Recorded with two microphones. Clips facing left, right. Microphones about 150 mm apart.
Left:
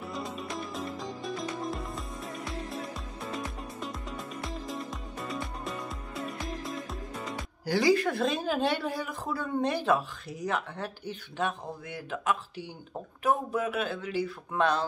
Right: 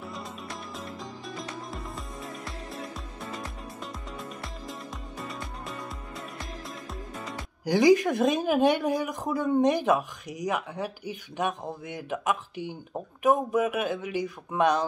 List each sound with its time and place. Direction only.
0.0 s music: centre (ahead or behind)
7.6 s a woman's voice: 15° right (ahead or behind)